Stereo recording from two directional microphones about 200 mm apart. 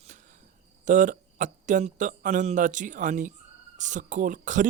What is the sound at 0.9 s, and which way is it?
A man's voice, 40° right (ahead or behind).